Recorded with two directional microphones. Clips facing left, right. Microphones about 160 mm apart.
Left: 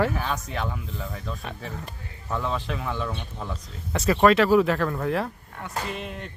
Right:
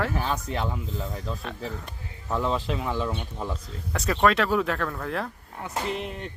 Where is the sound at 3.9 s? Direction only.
5° left (ahead or behind).